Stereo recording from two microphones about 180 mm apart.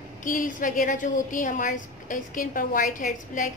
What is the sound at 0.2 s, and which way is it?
A woman's voice, 45° left (ahead or behind).